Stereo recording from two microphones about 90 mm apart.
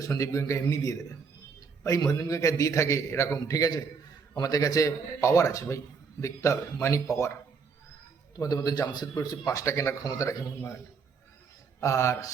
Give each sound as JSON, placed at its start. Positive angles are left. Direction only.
{"t": 0.0, "sound": "a man's voice", "side_deg": 35}
{"t": 2.0, "sound": "a man's voice", "side_deg": 40}
{"t": 8.4, "sound": "a man's voice", "side_deg": 40}
{"t": 11.8, "sound": "a man's voice", "side_deg": 30}